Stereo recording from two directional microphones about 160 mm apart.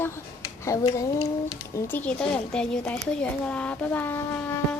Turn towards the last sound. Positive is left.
turn(degrees=15)  # may be behind; listen again after turning